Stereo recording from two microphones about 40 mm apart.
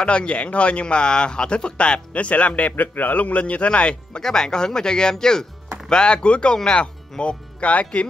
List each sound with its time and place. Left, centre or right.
0.0 s speech: left
4.2 s speech: centre; by 8.1 s left